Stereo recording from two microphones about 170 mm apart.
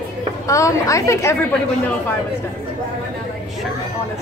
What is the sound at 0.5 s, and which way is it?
Speech, 20° left (ahead or behind).